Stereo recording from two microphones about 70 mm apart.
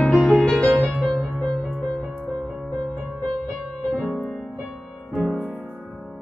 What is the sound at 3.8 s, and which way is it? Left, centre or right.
Music, centre.